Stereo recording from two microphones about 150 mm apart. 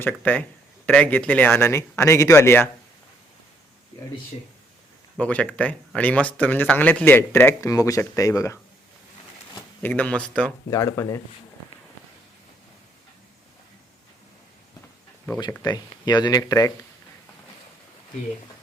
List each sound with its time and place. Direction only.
0.0 s speech: 10° left (ahead or behind)
5.1 s speech: 10° left (ahead or behind)
9.8 s speech: 10° left (ahead or behind)
10.7 s speech: 20° left (ahead or behind)
15.3 s speech: 25° left (ahead or behind)